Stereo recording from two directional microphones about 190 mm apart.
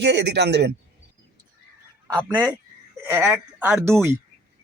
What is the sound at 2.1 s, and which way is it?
Speech, 20° right (ahead or behind).